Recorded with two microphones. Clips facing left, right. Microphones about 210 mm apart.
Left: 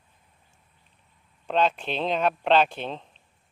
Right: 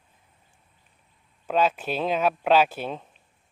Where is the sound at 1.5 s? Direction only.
5° right (ahead or behind).